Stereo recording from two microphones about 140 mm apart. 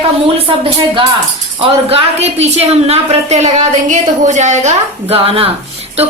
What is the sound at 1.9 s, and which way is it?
A woman's voice, 45° right (ahead or behind).